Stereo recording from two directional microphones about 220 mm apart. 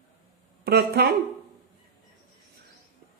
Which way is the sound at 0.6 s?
45° right (ahead or behind).